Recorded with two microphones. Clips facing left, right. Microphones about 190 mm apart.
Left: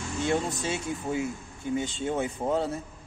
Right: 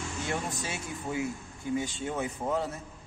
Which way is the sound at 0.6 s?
25° left (ahead or behind).